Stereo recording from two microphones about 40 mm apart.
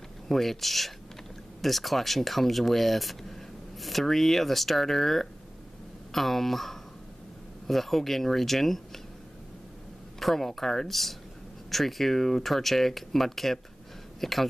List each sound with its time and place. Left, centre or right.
0.3 s speech: centre
10.2 s speech: centre